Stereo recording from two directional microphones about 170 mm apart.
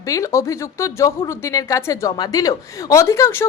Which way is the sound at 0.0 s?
20° left (ahead or behind).